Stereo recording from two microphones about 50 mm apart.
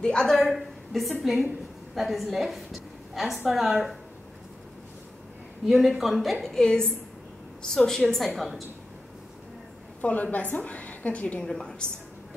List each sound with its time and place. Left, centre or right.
0.0 s a woman's voice: centre
0.6 s a sound: centre
1.2 s a woman's voice: centre
5.7 s a woman's voice: centre
6.4 s a woman's voice: centre
10.0 s a woman's voice: left
11.4 s a woman's voice: centre